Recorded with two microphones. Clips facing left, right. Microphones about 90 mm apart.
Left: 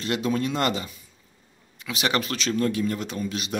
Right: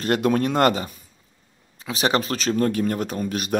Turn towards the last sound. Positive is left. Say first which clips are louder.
# right 4 dB
turn(degrees=-50)  # may be behind; listen again after turning